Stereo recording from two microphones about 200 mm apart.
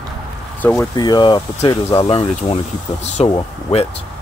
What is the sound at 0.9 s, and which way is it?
Speech, 20° left (ahead or behind).